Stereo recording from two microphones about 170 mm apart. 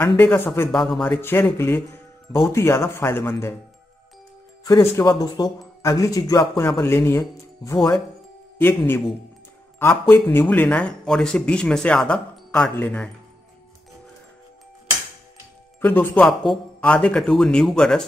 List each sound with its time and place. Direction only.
0.0 s speech: 10° left (ahead or behind)
1.0 s a man's voice: 10° left (ahead or behind)
4.6 s speech: 25° left (ahead or behind)
6.8 s a man's voice: 15° left (ahead or behind)
15.8 s a man's voice: 10° left (ahead or behind)